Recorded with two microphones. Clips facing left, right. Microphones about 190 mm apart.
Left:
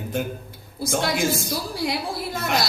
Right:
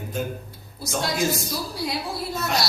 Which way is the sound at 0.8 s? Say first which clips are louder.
Left 2 dB; 55° left (ahead or behind).